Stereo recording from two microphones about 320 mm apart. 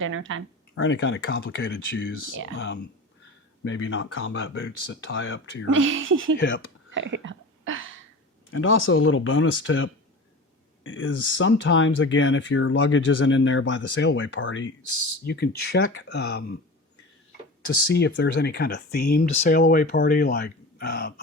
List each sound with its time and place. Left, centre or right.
0.0 s speech: right
0.8 s speech: left
3.6 s speech: left
5.6 s speech: right
6.9 s a sound: right
8.4 s speech: left
17.9 s speech: left